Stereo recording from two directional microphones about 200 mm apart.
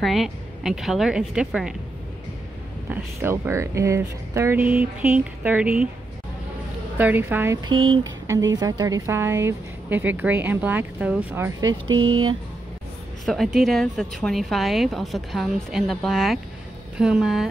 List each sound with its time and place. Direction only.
0.0 s a woman's voice: centre (ahead or behind)
2.9 s speech: 10° right (ahead or behind)
7.0 s speech: 10° right (ahead or behind)
11.6 s speech: 85° right
13.2 s a woman's voice: centre (ahead or behind)